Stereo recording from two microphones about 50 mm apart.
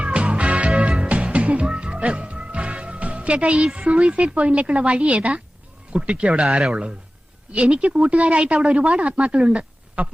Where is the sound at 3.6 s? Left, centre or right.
Centre.